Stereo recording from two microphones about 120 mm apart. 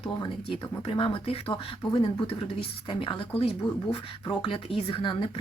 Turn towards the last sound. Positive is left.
turn(degrees=45)  # may be behind; listen again after turning